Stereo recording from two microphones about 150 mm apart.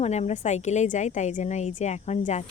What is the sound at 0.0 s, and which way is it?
A woman's voice, 50° left (ahead or behind).